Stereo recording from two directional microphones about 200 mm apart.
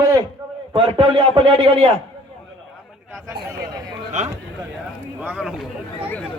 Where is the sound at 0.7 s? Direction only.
25° right (ahead or behind).